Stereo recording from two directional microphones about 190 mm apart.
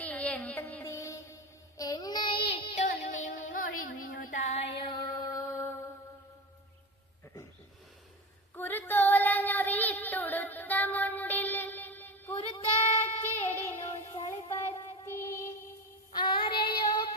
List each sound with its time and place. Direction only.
0.0 s music: 5° left (ahead or behind)
1.8 s child singing: 20° left (ahead or behind); by 4.7 s 35° left (ahead or behind)
4.8 s music: 25° left (ahead or behind)
5.5 s mantra: 15° left (ahead or behind)
8.5 s child singing: 10° left (ahead or behind)
12.4 s child singing: 30° left (ahead or behind)
13.0 s child singing: 10° left (ahead or behind)
14.4 s music: 30° left (ahead or behind)
15.0 s music: 15° left (ahead or behind)
16.1 s child singing: 25° left (ahead or behind)